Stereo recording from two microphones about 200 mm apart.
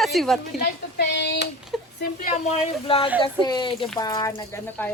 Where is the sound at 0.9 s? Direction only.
55° left (ahead or behind).